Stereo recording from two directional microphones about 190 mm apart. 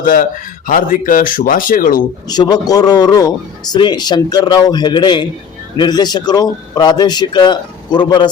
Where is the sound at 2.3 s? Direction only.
20° left (ahead or behind).